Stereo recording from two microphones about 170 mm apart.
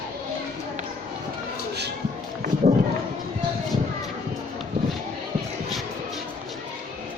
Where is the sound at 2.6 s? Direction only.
40° right (ahead or behind).